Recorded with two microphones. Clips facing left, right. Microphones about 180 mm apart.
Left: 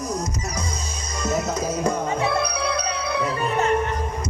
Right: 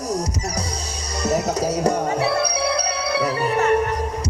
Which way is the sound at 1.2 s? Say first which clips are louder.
Right 3 dB; 35° right (ahead or behind).